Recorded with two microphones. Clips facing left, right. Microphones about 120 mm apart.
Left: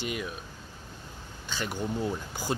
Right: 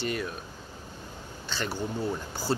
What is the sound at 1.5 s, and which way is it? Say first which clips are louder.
Speech: right 1 dB; 10° left (ahead or behind).